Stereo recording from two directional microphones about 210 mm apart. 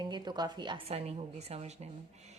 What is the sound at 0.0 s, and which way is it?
A woman's voice, 20° right (ahead or behind).